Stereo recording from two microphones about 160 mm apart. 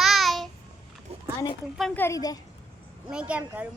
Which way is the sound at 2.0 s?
20° left (ahead or behind).